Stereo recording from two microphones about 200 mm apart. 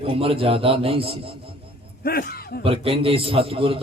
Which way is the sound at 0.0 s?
30° right (ahead or behind).